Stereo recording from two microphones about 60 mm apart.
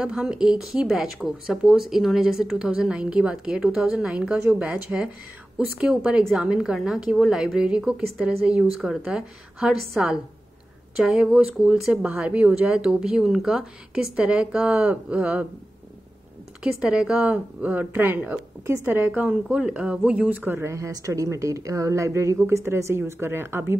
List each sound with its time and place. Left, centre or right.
0.0 s speech: centre
16.6 s speech: centre
17.9 s speech: right
20.5 s a woman's voice: right